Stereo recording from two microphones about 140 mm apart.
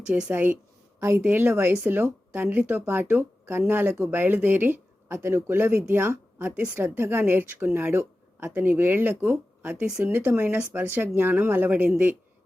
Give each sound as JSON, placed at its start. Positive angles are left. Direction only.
{"t": 0.1, "sound": "a woman's voice", "side_deg": -10}